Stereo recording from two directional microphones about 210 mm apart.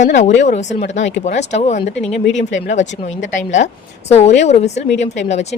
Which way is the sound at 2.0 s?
Centre (ahead or behind).